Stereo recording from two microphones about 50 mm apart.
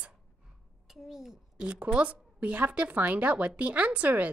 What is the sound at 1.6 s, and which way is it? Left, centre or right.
Speech, right.